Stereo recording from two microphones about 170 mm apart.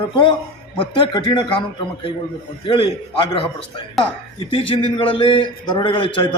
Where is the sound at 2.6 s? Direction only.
30° left (ahead or behind).